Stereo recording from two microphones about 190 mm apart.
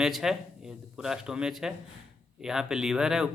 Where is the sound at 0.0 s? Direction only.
Centre (ahead or behind).